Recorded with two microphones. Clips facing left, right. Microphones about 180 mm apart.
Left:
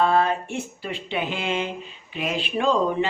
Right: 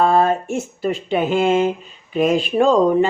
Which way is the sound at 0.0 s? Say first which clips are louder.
Right 5 dB; 45° right (ahead or behind).